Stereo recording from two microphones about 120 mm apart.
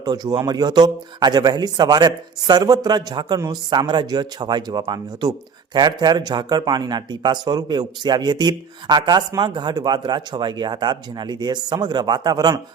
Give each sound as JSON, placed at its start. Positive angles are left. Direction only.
{"t": 0.0, "sound": "speech", "side_deg": -35}